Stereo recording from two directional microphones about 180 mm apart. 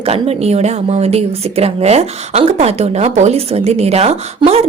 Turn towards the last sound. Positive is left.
turn(degrees=-35)  # may be behind; listen again after turning